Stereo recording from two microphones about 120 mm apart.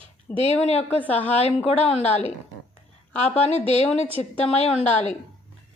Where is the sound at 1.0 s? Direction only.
15° left (ahead or behind).